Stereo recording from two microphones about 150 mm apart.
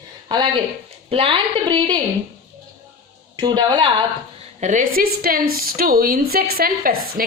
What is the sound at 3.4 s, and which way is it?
Speech, 30° right (ahead or behind).